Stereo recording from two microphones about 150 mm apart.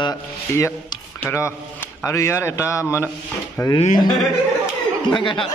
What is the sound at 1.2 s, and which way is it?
A man's voice, 15° left (ahead or behind).